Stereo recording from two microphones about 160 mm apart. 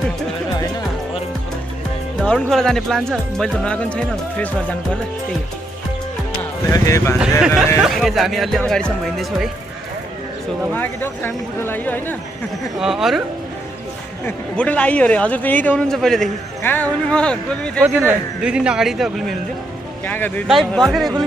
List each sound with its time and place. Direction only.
2.1 s speech: 5° left (ahead or behind)
6.7 s speech: 20° left (ahead or behind)
7.2 s speech: 5° right (ahead or behind)
10.7 s a man's voice: 10° left (ahead or behind)
12.7 s speech: centre (ahead or behind)
14.2 s a man's voice: 10° left (ahead or behind)
17.8 s speech: 10° right (ahead or behind)
20.1 s a man's voice: 10° left (ahead or behind)
20.4 s speech: centre (ahead or behind)